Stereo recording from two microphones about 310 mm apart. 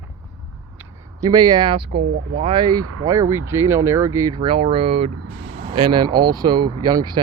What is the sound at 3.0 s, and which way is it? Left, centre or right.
Speech, centre.